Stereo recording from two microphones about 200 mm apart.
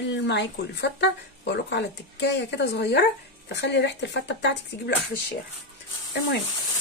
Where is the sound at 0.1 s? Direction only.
60° left (ahead or behind).